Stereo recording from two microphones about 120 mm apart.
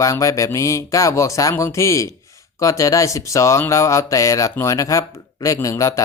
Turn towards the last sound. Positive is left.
turn(degrees=25)  # may be behind; listen again after turning